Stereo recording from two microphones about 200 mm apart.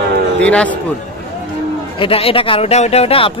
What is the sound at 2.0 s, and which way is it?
Speech, 30° left (ahead or behind).